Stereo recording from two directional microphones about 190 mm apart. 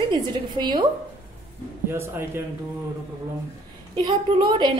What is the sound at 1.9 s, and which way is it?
Speech, 10° right (ahead or behind).